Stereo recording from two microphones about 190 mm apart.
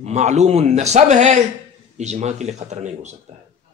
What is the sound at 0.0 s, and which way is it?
A man's voice, 35° right (ahead or behind).